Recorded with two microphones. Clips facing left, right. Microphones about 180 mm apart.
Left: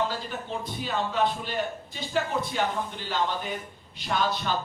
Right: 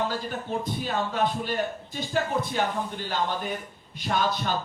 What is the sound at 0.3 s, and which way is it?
Speech, 50° right (ahead or behind).